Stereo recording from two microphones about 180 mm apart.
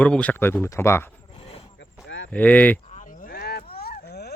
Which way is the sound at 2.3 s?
10° left (ahead or behind).